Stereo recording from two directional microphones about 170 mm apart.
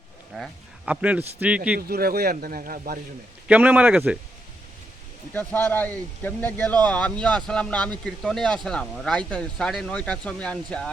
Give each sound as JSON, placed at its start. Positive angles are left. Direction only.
{"t": 0.3, "sound": "speech", "side_deg": -5}
{"t": 1.9, "sound": "speech", "side_deg": -65}
{"t": 3.4, "sound": "speech", "side_deg": -10}
{"t": 5.3, "sound": "speech", "side_deg": 10}